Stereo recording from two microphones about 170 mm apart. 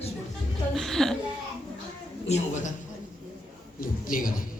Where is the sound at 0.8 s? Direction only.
Centre (ahead or behind).